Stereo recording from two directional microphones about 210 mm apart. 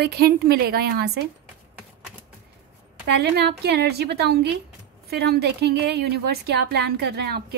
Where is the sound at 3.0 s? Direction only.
50° right (ahead or behind).